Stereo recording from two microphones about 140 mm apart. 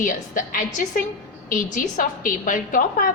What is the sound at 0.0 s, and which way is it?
A woman's voice, 75° left (ahead or behind).